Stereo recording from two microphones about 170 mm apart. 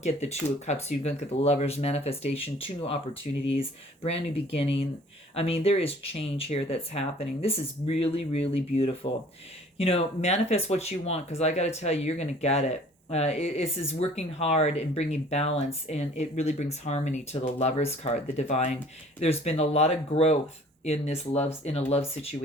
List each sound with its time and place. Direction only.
0.0 s speech: 40° left (ahead or behind)